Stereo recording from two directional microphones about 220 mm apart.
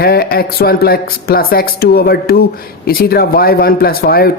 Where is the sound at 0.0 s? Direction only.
45° left (ahead or behind).